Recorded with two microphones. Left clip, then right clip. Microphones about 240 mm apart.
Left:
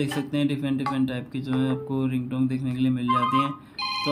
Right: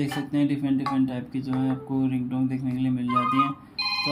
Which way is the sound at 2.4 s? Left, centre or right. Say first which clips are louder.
Left 1 dB; centre.